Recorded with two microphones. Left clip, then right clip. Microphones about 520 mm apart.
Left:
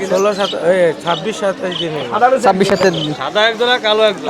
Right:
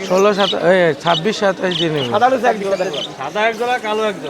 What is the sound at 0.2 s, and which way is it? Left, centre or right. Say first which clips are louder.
Speech: right 1 dB; right.